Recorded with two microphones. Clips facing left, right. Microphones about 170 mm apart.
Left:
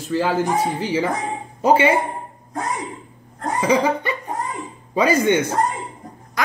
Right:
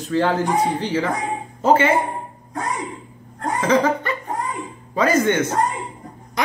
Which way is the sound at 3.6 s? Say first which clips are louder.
Even; 10° left (ahead or behind).